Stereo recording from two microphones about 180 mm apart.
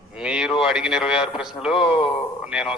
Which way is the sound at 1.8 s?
30° left (ahead or behind).